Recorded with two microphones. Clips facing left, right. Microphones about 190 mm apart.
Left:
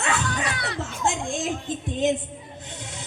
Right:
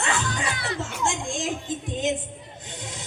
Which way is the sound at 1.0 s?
60° left (ahead or behind).